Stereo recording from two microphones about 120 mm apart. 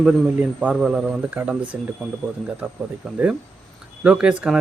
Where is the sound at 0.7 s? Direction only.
5° right (ahead or behind).